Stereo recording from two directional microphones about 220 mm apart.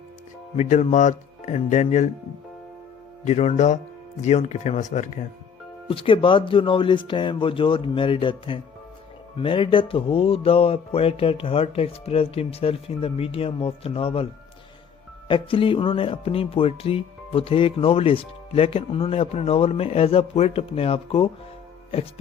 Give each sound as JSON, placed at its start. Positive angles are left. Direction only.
{"t": 0.5, "sound": "speech", "side_deg": 30}
{"t": 3.2, "sound": "speech", "side_deg": 30}
{"t": 15.3, "sound": "speech", "side_deg": 25}